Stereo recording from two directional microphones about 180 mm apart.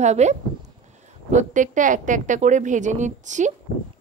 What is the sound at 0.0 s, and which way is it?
A woman's voice, 40° right (ahead or behind).